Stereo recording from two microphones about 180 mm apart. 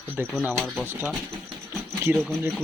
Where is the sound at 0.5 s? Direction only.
5° left (ahead or behind).